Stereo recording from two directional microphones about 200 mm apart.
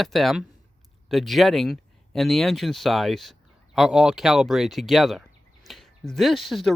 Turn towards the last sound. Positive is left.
turn(degrees=0)  # may be behind; listen again after turning